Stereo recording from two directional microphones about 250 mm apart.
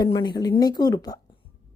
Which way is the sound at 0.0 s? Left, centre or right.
Centre.